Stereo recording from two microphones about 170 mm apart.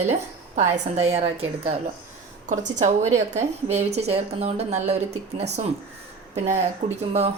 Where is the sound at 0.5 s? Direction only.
40° right (ahead or behind).